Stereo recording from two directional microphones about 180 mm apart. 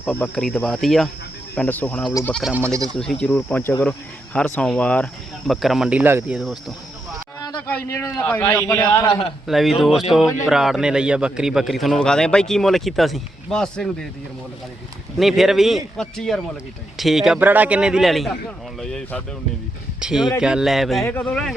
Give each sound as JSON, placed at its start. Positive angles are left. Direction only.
{"t": 0.0, "sound": "a man's voice", "side_deg": 10}
{"t": 2.4, "sound": "speech", "side_deg": -5}
{"t": 2.9, "sound": "a man's voice", "side_deg": 5}
{"t": 7.7, "sound": "a man's voice", "side_deg": 15}
{"t": 9.5, "sound": "a man's voice", "side_deg": 0}
{"t": 15.2, "sound": "a man's voice", "side_deg": 0}